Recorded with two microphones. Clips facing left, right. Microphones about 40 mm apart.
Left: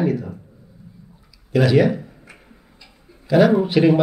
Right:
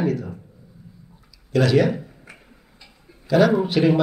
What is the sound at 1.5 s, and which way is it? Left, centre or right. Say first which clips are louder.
Speech: left 2 dB; centre.